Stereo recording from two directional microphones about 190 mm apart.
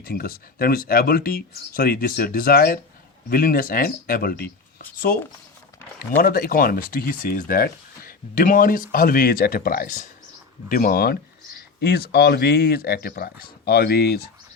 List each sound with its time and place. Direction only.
0.0 s speech: 50° left (ahead or behind)